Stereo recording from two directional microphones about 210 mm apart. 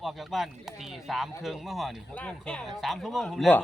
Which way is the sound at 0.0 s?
Centre (ahead or behind).